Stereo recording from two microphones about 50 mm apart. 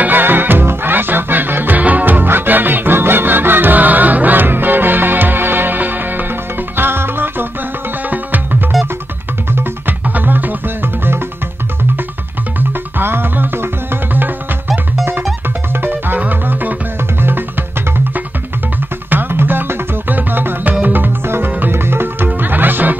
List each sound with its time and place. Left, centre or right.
0.0 s music: right
10.0 s music: right
12.5 s music: right
15.7 s music: right
19.0 s music: right